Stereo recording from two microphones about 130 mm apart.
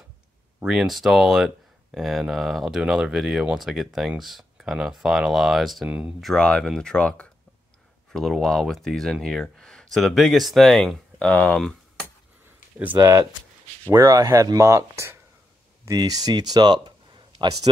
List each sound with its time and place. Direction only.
0.9 s speech: centre (ahead or behind)
6.3 s speech: 5° left (ahead or behind)
12.9 s speech: 30° right (ahead or behind)